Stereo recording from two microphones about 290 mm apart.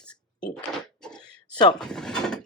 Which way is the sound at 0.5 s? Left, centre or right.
Centre.